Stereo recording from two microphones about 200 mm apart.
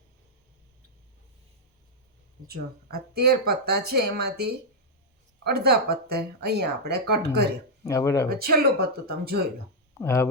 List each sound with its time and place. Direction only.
2.5 s speech: 50° right (ahead or behind)
7.9 s speech: 15° left (ahead or behind)
8.3 s speech: 50° right (ahead or behind)
10.0 s speech: 15° left (ahead or behind)